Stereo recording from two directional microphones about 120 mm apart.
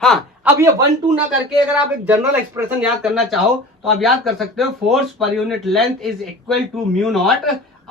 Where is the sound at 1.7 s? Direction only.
15° right (ahead or behind).